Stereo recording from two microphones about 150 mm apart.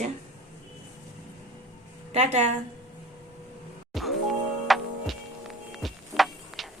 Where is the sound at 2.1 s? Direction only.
50° right (ahead or behind).